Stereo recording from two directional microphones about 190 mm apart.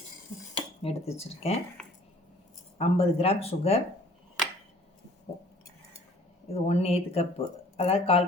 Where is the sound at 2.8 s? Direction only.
30° left (ahead or behind).